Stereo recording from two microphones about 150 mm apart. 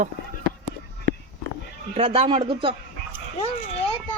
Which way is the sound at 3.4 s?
40° left (ahead or behind).